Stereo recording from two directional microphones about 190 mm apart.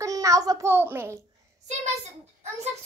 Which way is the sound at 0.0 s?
15° right (ahead or behind).